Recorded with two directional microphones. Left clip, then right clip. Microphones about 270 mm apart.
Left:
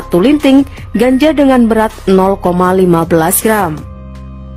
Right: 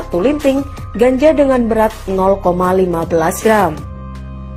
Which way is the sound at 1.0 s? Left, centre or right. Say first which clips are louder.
Left 1 dB; left.